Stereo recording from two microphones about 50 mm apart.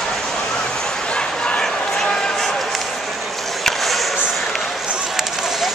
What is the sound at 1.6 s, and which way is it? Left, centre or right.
Run, centre.